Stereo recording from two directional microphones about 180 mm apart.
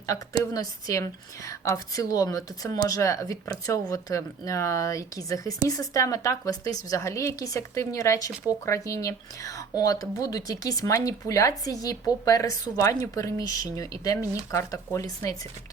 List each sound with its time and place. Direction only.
0.1 s speech: 20° left (ahead or behind)